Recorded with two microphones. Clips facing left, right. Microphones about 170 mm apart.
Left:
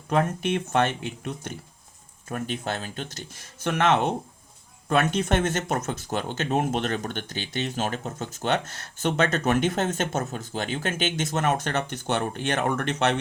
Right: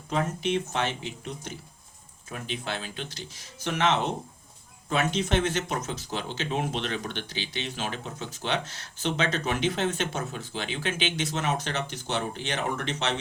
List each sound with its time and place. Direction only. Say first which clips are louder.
0.1 s speech: left 3 dB; 55° left (ahead or behind)